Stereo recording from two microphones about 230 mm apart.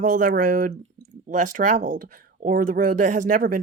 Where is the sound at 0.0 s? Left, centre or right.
Right.